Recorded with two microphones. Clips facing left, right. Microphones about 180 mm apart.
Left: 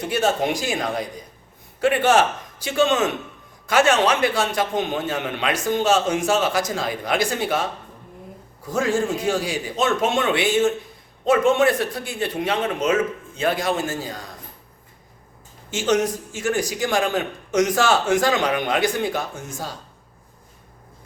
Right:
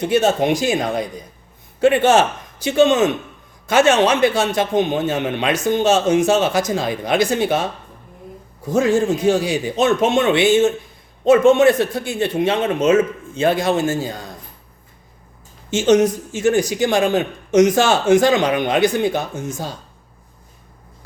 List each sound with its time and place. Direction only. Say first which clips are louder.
0.1 s a man's voice: right 5 dB; 25° right (ahead or behind)
8.6 s a man's voice: right 6 dB; 20° right (ahead or behind)
15.7 s a man's voice: right 6 dB; 20° right (ahead or behind)